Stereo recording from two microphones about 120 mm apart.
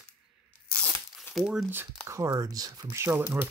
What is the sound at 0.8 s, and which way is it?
Tearing, 15° left (ahead or behind).